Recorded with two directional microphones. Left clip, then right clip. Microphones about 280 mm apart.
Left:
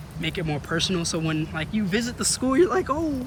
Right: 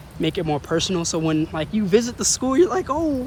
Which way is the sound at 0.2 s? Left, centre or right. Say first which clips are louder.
Right 6 dB; centre.